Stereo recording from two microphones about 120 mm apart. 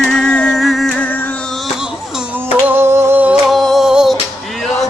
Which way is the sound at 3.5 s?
Centre (ahead or behind).